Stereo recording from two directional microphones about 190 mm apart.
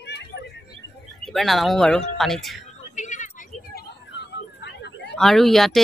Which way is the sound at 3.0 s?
40° left (ahead or behind).